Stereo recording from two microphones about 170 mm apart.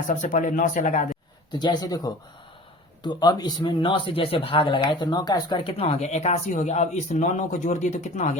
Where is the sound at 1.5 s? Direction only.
25° left (ahead or behind).